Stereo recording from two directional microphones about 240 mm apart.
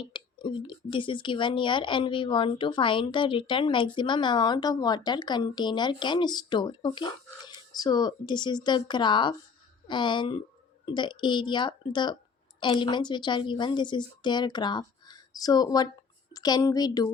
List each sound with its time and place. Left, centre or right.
0.0 s a woman's voice: left